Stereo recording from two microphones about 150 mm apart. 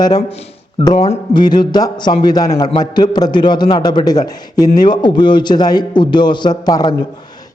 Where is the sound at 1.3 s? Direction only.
30° left (ahead or behind).